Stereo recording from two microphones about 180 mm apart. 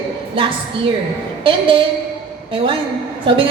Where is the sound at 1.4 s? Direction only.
30° right (ahead or behind).